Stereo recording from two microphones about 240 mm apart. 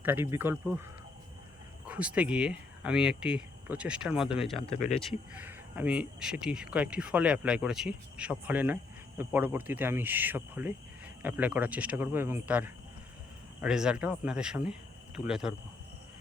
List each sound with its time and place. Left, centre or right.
0.0 s speech: centre
1.9 s speech: centre
4.5 s speech: left
4.9 s speech: centre